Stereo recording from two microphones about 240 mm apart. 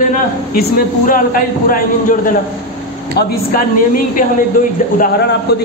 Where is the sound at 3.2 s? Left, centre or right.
Left.